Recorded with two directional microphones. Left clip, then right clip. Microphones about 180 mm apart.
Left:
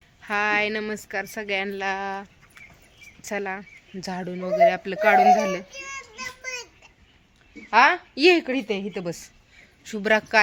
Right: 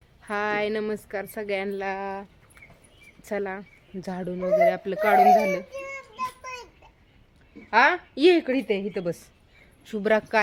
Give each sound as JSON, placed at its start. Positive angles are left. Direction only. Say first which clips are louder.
{"t": 0.2, "sound": "a woman's voice", "louder": "left 4 dB", "side_deg": -5}
{"t": 5.7, "sound": "child singing", "louder": "right 1 dB", "side_deg": -50}
{"t": 6.4, "sound": "a sound", "louder": "left 4 dB", "side_deg": -35}
{"t": 7.7, "sound": "a woman's voice", "louder": "left 2 dB", "side_deg": 0}